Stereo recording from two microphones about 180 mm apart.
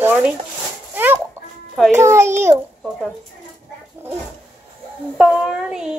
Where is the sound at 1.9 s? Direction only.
15° right (ahead or behind).